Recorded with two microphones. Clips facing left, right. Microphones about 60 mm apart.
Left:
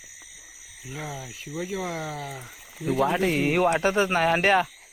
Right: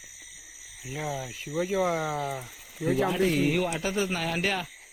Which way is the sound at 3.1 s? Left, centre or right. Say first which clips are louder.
Left 1 dB; left.